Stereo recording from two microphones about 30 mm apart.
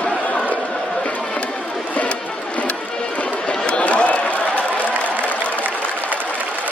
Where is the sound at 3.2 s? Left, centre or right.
Left.